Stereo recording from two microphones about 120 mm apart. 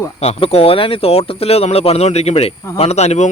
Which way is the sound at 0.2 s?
55° left (ahead or behind).